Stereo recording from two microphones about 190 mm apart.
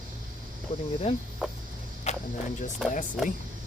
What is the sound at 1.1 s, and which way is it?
Speech, 35° left (ahead or behind).